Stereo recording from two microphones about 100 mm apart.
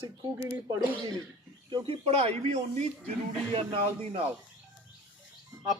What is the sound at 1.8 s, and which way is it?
Speech, 75° right (ahead or behind).